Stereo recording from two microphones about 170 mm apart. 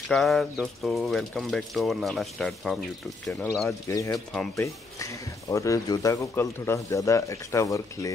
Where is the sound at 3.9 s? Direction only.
20° left (ahead or behind).